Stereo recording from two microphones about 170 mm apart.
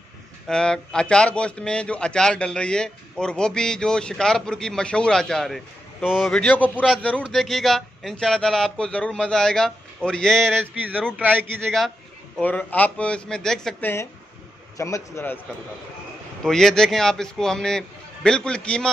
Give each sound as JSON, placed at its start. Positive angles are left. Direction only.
{"t": 0.5, "sound": "a man's voice", "side_deg": 5}
{"t": 11.1, "sound": "a man's voice", "side_deg": -10}
{"t": 12.4, "sound": "a man's voice", "side_deg": 10}
{"t": 16.4, "sound": "a man's voice", "side_deg": 5}